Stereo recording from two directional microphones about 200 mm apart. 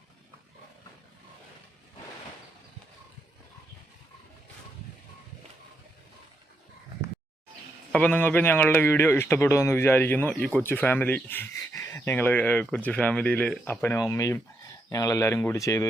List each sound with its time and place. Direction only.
7.9 s a man's voice: 5° left (ahead or behind)